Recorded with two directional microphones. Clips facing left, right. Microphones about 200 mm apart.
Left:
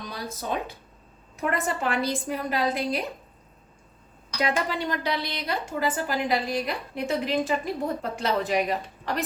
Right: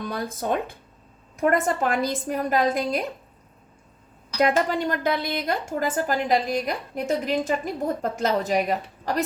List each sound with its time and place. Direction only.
0.0 s a woman's voice: 50° right (ahead or behind)
4.4 s a woman's voice: 45° right (ahead or behind)